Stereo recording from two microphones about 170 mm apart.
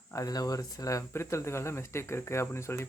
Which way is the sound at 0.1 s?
20° left (ahead or behind).